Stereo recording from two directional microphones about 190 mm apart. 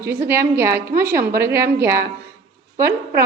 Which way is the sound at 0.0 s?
15° right (ahead or behind).